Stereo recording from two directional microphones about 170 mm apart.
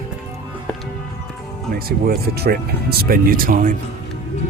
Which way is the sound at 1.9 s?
65° right (ahead or behind).